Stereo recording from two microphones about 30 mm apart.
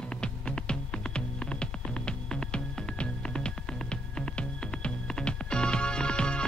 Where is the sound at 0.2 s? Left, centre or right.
Left.